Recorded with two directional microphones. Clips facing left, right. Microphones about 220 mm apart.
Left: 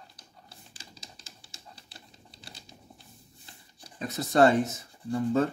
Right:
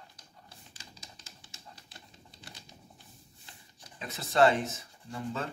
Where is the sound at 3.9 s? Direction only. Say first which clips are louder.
Left 8 dB; 40° left (ahead or behind).